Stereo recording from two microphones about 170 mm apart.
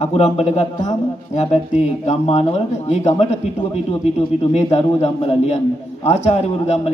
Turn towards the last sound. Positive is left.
turn(degrees=40)  # may be behind; listen again after turning